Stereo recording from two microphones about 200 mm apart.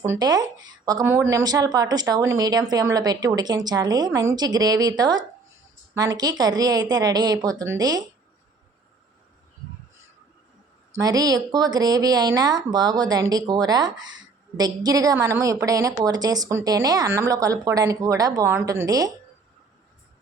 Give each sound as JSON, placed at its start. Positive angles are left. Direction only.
{"t": 0.0, "sound": "speech", "side_deg": -15}
{"t": 10.9, "sound": "speech", "side_deg": -20}
{"t": 13.9, "sound": "speech", "side_deg": -75}
{"t": 14.5, "sound": "speech", "side_deg": -20}